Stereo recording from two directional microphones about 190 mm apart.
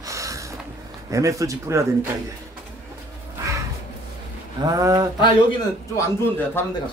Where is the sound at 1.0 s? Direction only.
15° right (ahead or behind).